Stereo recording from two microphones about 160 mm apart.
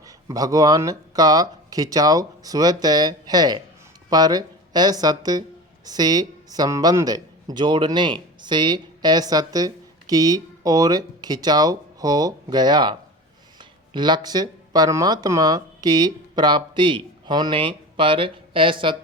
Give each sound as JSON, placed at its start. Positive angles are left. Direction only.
{"t": 0.0, "sound": "a man's voice", "side_deg": -20}